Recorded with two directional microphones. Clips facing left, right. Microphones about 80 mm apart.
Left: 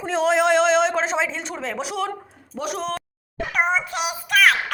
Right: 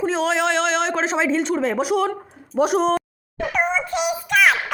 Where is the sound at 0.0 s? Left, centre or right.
Centre.